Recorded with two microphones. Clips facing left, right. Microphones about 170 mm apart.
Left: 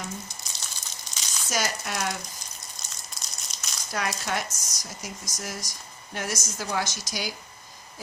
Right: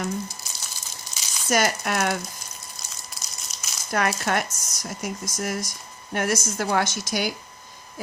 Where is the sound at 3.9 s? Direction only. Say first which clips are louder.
Right 6 dB; 55° right (ahead or behind).